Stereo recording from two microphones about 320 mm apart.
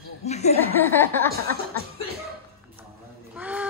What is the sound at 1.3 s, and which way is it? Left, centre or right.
Speech, right.